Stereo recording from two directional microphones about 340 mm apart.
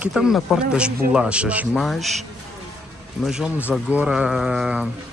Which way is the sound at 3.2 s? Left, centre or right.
Centre.